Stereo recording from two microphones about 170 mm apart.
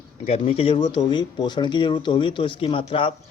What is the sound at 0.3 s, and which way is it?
Speech, 35° left (ahead or behind).